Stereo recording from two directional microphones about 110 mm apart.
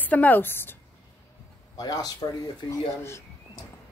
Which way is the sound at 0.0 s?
15° left (ahead or behind).